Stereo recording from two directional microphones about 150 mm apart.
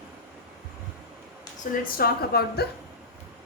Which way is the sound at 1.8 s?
90° left.